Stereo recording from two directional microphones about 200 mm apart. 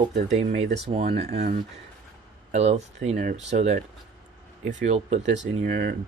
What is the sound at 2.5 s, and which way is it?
Speech, 35° right (ahead or behind).